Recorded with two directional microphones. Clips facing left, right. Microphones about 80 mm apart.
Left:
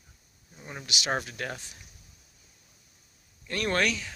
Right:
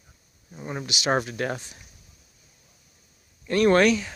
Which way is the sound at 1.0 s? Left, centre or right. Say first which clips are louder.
Right 7 dB; right.